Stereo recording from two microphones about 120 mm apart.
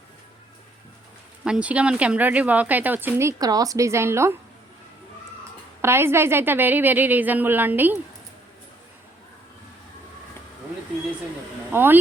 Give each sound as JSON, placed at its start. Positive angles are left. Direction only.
{"t": 1.5, "sound": "a woman's voice", "side_deg": -10}
{"t": 5.8, "sound": "a woman's voice", "side_deg": -20}
{"t": 11.7, "sound": "speech", "side_deg": -15}